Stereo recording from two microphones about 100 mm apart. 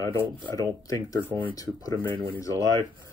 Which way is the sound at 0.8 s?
35° left (ahead or behind).